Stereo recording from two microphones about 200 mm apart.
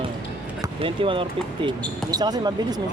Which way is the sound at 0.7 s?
25° right (ahead or behind).